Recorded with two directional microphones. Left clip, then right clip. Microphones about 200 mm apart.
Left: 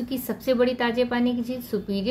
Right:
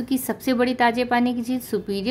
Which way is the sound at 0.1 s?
35° right (ahead or behind).